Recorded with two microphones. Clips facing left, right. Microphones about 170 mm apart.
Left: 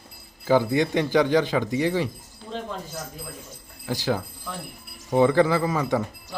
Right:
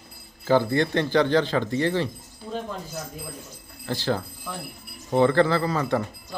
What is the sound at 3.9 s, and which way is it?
Speech, 10° left (ahead or behind).